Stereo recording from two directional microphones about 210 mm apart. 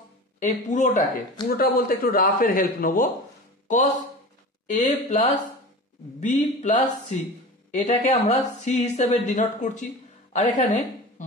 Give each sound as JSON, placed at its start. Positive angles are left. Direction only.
{"t": 0.4, "sound": "a man's voice", "side_deg": 35}
{"t": 4.6, "sound": "a woman's voice", "side_deg": 35}